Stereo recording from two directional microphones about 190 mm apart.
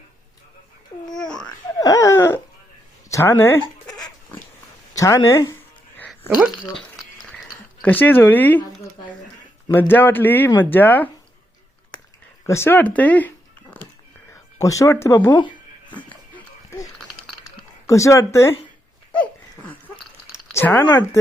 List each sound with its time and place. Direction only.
1.1 s babbling: 5° left (ahead or behind)
1.4 s wail: 20° left (ahead or behind)
3.1 s speech: 15° left (ahead or behind)
3.6 s dog: 20° left (ahead or behind)
4.9 s speech: 15° left (ahead or behind)
6.2 s speech: 5° right (ahead or behind)
7.8 s speech: 10° left (ahead or behind)
12.5 s speech: 15° left (ahead or behind)
15.9 s music: 25° left (ahead or behind)
16.3 s dog: 15° left (ahead or behind)
17.8 s speech: 15° left (ahead or behind)
20.5 s speech: 10° left (ahead or behind)